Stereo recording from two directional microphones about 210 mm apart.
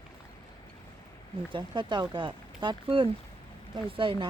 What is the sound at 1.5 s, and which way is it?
Speech, 20° right (ahead or behind).